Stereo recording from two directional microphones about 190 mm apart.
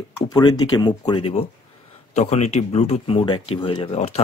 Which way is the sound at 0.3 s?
20° left (ahead or behind).